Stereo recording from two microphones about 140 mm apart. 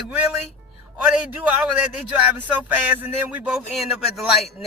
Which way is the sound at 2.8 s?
10° right (ahead or behind).